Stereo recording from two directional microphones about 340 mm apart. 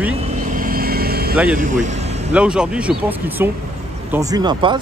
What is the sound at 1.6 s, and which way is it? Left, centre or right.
Speech, right.